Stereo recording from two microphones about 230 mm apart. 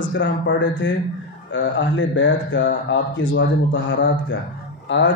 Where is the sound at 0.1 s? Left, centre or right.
Left.